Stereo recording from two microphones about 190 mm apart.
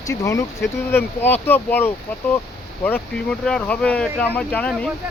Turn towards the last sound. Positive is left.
turn(degrees=5)  # may be behind; listen again after turning